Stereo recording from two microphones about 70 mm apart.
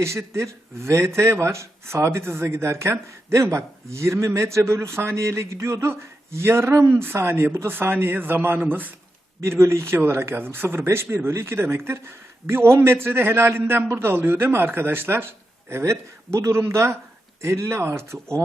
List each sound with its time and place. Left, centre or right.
0.0 s speech: right
9.4 s speech: right